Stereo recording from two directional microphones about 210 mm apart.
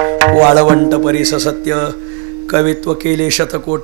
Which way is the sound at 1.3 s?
25° right (ahead or behind).